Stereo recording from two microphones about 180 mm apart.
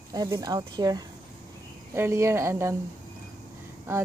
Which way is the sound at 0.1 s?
20° right (ahead or behind).